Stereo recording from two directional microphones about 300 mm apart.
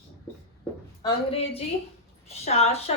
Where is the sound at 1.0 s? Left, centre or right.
Centre.